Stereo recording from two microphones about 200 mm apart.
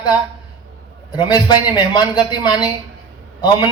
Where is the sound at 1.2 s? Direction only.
20° left (ahead or behind).